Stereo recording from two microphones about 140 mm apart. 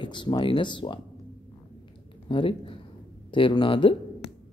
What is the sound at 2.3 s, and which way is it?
Speech, 40° left (ahead or behind).